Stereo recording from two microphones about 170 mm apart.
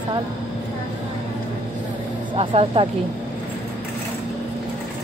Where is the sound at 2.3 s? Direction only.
35° right (ahead or behind).